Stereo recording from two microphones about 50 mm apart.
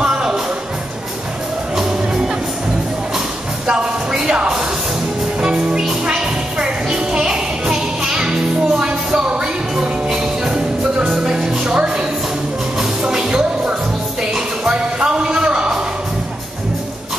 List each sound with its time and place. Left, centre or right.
0.0 s music: centre
3.6 s music: centre